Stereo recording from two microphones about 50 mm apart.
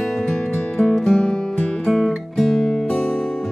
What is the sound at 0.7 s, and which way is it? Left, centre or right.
Music, centre.